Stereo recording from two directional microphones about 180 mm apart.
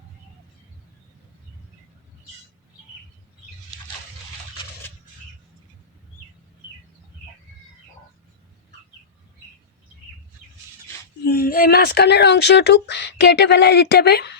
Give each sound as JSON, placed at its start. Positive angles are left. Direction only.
{"t": 11.3, "sound": "speech", "side_deg": 55}